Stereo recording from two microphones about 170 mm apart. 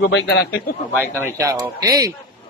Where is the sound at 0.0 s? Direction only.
85° left.